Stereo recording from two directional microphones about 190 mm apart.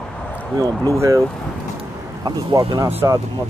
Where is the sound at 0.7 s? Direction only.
10° left (ahead or behind).